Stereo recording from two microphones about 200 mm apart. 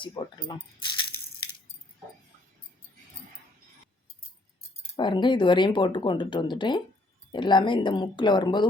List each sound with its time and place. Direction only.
0.0 s speech: 20° left (ahead or behind)
4.9 s speech: 25° left (ahead or behind)